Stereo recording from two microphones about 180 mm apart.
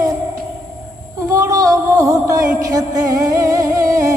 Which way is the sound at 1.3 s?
20° right (ahead or behind).